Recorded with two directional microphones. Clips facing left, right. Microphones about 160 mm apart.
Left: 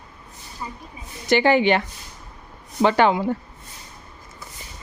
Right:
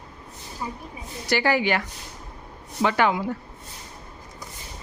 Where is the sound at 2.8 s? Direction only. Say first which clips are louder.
Left 4 dB; 30° left (ahead or behind).